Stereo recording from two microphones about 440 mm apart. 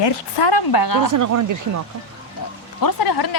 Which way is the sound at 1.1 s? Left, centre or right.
Right.